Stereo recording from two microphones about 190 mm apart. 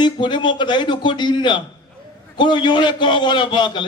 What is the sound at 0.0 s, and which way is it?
A man's voice, 25° left (ahead or behind).